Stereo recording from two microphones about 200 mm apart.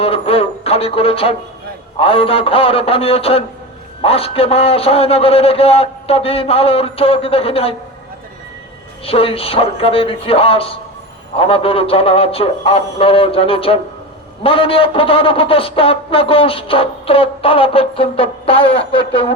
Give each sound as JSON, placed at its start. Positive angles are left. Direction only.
{"t": 0.0, "sound": "a sound", "side_deg": 30}
{"t": 2.0, "sound": "a man's voice", "side_deg": 30}
{"t": 9.0, "sound": "a man's voice", "side_deg": 30}